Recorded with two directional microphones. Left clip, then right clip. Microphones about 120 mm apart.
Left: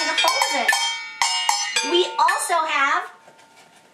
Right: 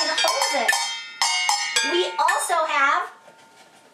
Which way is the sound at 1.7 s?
5° left (ahead or behind).